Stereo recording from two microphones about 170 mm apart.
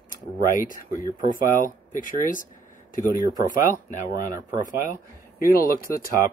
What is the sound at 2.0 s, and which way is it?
Speech, 50° left (ahead or behind).